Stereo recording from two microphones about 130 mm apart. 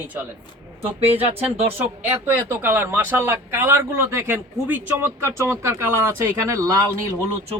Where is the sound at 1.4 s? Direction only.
15° right (ahead or behind).